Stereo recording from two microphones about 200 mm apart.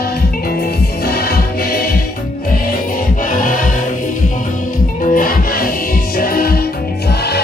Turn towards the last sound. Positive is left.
turn(degrees=50)  # may be behind; listen again after turning